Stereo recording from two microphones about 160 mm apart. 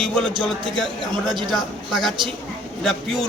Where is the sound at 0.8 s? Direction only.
Centre (ahead or behind).